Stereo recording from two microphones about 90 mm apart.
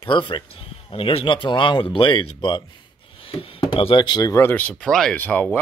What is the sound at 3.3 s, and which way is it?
Speech, 90° left.